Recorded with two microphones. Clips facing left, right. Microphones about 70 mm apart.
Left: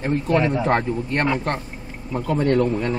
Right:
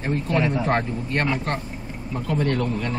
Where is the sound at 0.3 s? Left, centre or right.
Left.